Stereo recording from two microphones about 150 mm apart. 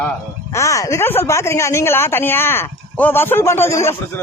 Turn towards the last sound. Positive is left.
turn(degrees=15)  # may be behind; listen again after turning